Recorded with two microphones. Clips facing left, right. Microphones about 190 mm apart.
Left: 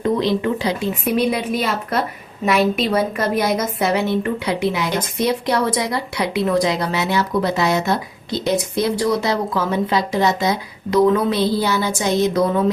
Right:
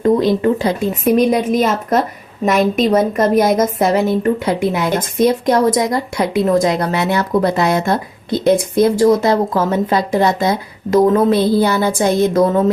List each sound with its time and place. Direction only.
0.0 s speech: 45° right (ahead or behind)